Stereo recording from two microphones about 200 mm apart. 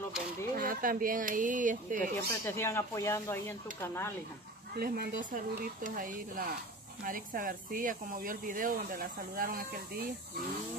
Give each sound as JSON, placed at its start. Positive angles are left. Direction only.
{"t": 0.6, "sound": "speech", "side_deg": -45}
{"t": 2.0, "sound": "speech", "side_deg": 15}
{"t": 4.7, "sound": "speech", "side_deg": -50}